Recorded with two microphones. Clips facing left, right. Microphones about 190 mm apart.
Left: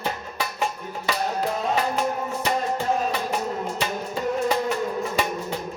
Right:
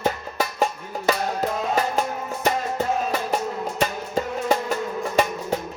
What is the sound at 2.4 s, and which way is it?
Music, 45° right (ahead or behind).